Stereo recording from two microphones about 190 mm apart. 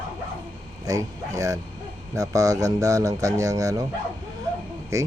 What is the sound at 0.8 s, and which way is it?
Speech, 20° right (ahead or behind).